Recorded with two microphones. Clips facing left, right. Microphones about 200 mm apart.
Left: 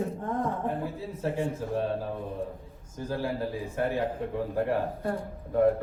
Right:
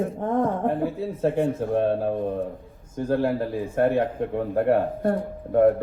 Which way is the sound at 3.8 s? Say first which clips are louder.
Right 7 dB; 60° right (ahead or behind).